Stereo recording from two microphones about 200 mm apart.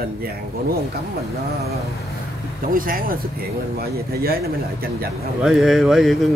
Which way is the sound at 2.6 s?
45° right (ahead or behind).